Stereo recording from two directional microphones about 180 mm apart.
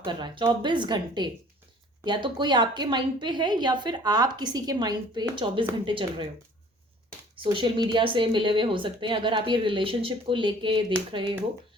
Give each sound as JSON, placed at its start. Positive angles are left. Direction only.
{"t": 0.0, "sound": "a woman's voice", "side_deg": -25}
{"t": 7.5, "sound": "a woman's voice", "side_deg": -25}